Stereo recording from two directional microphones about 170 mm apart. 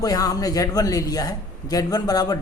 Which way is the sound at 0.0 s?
20° left (ahead or behind).